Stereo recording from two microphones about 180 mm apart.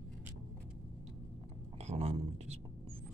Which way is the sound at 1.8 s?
35° right (ahead or behind).